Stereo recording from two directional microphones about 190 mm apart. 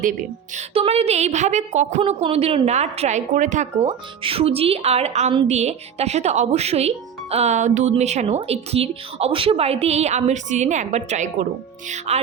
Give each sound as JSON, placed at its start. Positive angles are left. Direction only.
{"t": 0.0, "sound": "speech", "side_deg": -45}
{"t": 0.7, "sound": "a woman's voice", "side_deg": -30}
{"t": 3.8, "sound": "a woman's voice", "side_deg": -30}